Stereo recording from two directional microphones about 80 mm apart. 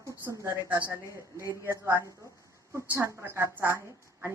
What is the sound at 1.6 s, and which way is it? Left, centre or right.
Speech, right.